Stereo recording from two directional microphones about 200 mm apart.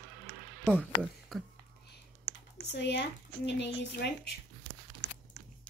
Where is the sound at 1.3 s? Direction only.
Centre (ahead or behind).